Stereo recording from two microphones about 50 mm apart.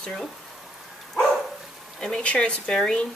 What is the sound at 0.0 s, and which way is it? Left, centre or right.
Speech, centre.